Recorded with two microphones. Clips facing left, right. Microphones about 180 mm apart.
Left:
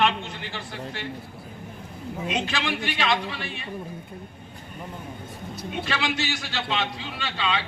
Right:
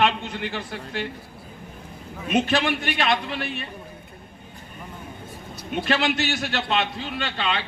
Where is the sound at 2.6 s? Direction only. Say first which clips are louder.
Right 3 dB; 55° right (ahead or behind).